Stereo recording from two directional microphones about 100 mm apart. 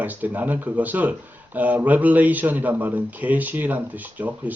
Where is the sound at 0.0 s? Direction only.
15° right (ahead or behind).